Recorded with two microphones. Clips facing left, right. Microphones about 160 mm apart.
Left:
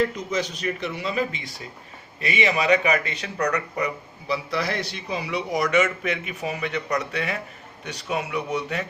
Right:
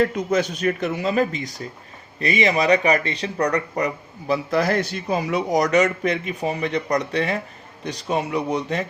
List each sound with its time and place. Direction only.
0.0 s speech: 50° right (ahead or behind); by 8.9 s 35° right (ahead or behind)